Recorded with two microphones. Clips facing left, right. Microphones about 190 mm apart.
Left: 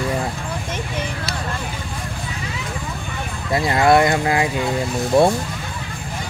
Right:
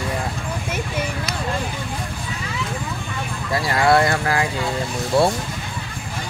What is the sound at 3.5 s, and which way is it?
Speech, 20° left (ahead or behind).